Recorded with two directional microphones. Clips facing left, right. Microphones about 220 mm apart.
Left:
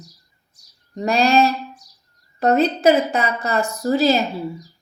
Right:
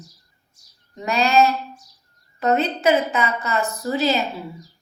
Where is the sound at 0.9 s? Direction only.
35° left (ahead or behind).